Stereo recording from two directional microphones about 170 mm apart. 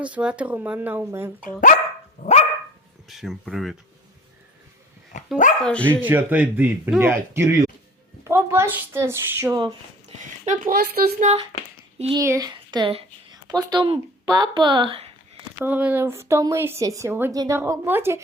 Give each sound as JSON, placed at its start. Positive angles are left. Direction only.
{"t": 0.0, "sound": "speech", "side_deg": -5}
{"t": 2.2, "sound": "dog", "side_deg": 45}
{"t": 3.1, "sound": "speech", "side_deg": 0}
{"t": 5.1, "sound": "speech", "side_deg": 45}
{"t": 5.5, "sound": "speech", "side_deg": 5}
{"t": 6.0, "sound": "speech", "side_deg": -10}
{"t": 10.4, "sound": "speech", "side_deg": -50}
{"t": 11.2, "sound": "speech", "side_deg": -40}
{"t": 12.1, "sound": "a woman's voice", "side_deg": -20}
{"t": 15.6, "sound": "a woman's voice", "side_deg": -10}
{"t": 17.6, "sound": "speech", "side_deg": -10}